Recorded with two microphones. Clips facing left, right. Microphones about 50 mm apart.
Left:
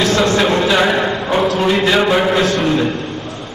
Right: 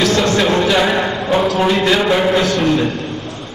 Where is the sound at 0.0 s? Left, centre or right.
Left.